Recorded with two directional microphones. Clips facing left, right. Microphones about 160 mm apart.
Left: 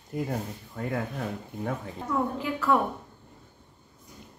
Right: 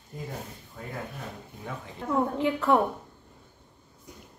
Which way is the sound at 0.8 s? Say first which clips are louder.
Left 7 dB; 65° left (ahead or behind).